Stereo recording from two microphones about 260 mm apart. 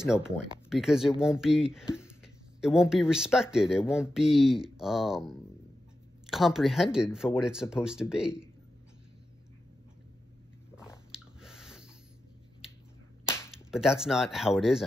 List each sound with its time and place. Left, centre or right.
0.0 s speech: centre
6.3 s speech: centre
10.8 s biting: centre
13.5 s speech: centre